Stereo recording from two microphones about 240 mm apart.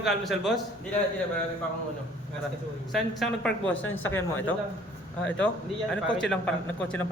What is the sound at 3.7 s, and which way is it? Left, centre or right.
Speech, left.